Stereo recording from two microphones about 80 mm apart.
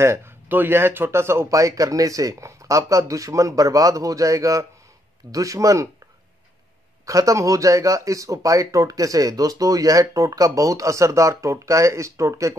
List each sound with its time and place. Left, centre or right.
0.0 s speech: right
7.1 s speech: right